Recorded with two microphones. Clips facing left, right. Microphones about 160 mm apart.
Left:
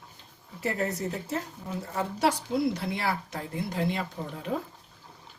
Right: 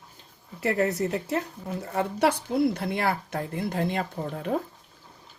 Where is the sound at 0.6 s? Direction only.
70° right (ahead or behind); by 4.5 s 50° right (ahead or behind).